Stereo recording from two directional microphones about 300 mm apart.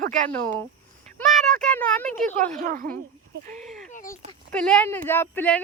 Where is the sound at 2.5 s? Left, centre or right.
Right.